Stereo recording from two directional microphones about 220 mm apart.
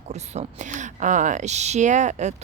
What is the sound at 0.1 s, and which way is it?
Speech, 30° right (ahead or behind).